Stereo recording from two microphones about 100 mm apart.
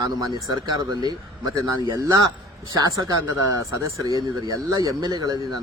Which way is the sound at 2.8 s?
35° right (ahead or behind).